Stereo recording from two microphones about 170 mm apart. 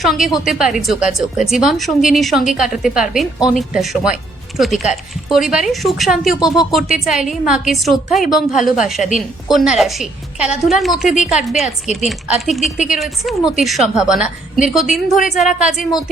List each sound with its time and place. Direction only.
0.0 s speech: centre (ahead or behind)
11.6 s a woman's voice: 40° left (ahead or behind)
12.0 s speech: centre (ahead or behind)